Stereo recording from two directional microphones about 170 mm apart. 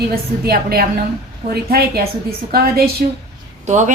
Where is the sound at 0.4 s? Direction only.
65° right (ahead or behind).